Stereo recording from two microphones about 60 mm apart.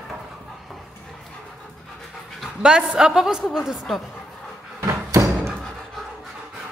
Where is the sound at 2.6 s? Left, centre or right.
Centre.